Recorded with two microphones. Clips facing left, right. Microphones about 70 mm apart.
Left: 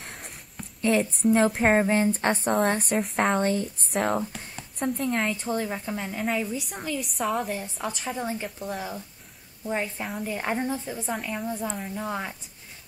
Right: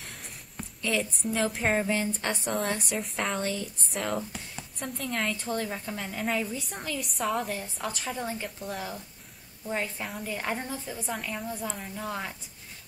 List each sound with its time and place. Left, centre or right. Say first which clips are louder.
0.8 s a woman's voice: left 8 dB; left
1.6 s a woman's voice: left 6 dB; left
3.3 s speech: left 7 dB; left
3.9 s a woman's voice: left 6 dB; left
4.8 s speech: left 9 dB; left
5.1 s a woman's voice: left 3 dB; centre
6.8 s a woman's voice: left 2 dB; centre
7.9 s a woman's voice: left 4 dB; centre
11.1 s a woman's voice: left 4 dB; centre
11.9 s a woman's voice: left 3 dB; centre